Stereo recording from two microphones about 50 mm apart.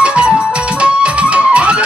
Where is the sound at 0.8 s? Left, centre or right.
Right.